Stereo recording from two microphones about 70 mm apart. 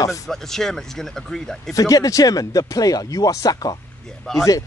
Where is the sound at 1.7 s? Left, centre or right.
Left.